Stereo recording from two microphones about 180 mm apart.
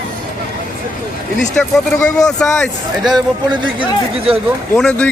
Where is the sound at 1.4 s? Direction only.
5° left (ahead or behind).